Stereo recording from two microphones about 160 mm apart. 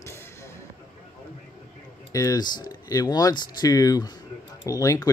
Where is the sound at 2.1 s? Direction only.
20° left (ahead or behind).